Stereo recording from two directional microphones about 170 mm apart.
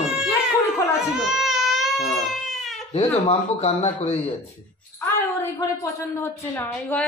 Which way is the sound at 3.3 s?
40° left (ahead or behind).